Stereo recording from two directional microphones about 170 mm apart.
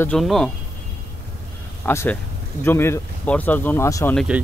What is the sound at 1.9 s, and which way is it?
Speech, 15° left (ahead or behind).